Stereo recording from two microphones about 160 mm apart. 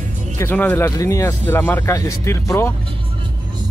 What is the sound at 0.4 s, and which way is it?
Speech, 10° left (ahead or behind).